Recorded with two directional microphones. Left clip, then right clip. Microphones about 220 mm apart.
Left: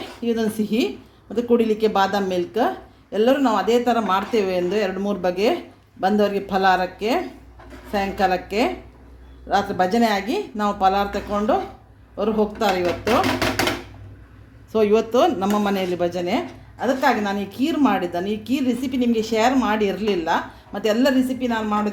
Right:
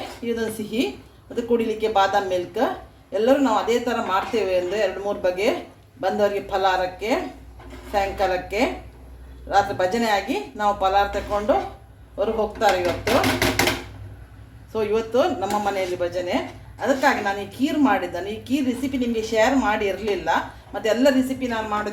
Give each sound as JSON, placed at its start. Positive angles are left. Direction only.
{"t": 0.3, "sound": "a woman's voice", "side_deg": 50}
{"t": 14.7, "sound": "a woman's voice", "side_deg": 50}